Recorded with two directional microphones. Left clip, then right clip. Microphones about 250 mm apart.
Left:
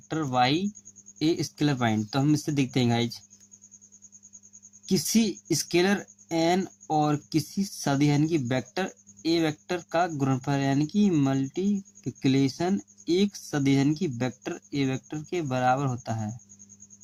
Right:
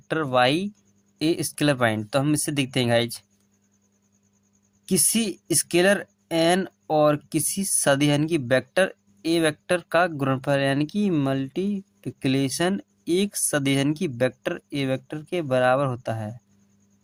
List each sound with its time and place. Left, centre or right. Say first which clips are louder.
0.1 s speech: right 4 dB; right
4.9 s speech: right 1 dB; right